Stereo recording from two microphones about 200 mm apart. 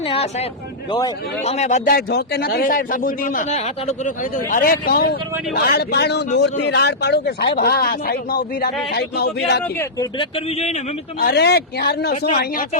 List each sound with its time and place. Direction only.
0.0 s speech: 30° left (ahead or behind)
1.5 s a man's voice: 35° left (ahead or behind); by 9.6 s 55° left (ahead or behind)
9.6 s speech: 10° left (ahead or behind)
10.2 s speech: 30° left (ahead or behind)
11.2 s a man's voice: 50° left (ahead or behind)